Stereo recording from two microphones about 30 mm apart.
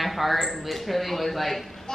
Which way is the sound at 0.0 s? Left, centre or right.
Centre.